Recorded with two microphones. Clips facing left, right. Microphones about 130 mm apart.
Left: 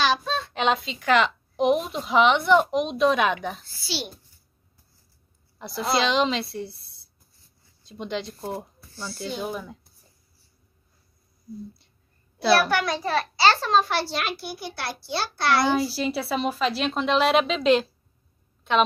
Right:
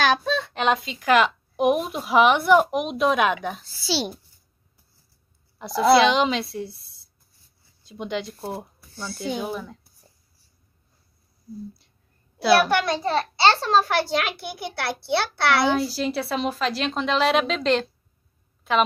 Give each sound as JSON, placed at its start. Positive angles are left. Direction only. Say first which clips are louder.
{"t": 0.0, "sound": "a sound", "louder": "right 2 dB", "side_deg": -60}
{"t": 0.6, "sound": "speech", "louder": "left 2 dB", "side_deg": 0}
{"t": 3.8, "sound": "a child's voice", "louder": "right 7 dB", "side_deg": -90}
{"t": 5.6, "sound": "a woman's voice", "louder": "right 8 dB", "side_deg": 0}
{"t": 8.4, "sound": "speech", "louder": "even", "side_deg": -15}
{"t": 9.0, "sound": "speech", "louder": "right 2 dB", "side_deg": 0}
{"t": 12.6, "sound": "a child's voice", "louder": "right 2 dB", "side_deg": -25}
{"t": 13.8, "sound": "a child's voice", "louder": "right 3 dB", "side_deg": -50}
{"t": 15.7, "sound": "a woman's voice", "louder": "right 1 dB", "side_deg": 0}